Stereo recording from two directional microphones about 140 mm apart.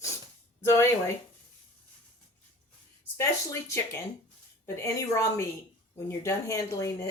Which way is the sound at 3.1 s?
20° left (ahead or behind).